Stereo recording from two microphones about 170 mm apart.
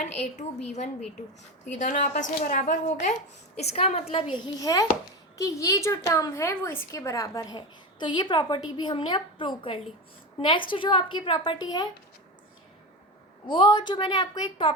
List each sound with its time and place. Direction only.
0.0 s a woman's voice: 40° left (ahead or behind); by 11.9 s 25° left (ahead or behind)
13.5 s a woman's voice: 30° left (ahead or behind)